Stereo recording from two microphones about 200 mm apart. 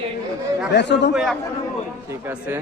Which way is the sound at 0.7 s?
60° left (ahead or behind).